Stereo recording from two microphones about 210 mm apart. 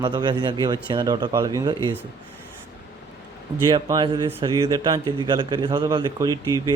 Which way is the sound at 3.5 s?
15° right (ahead or behind).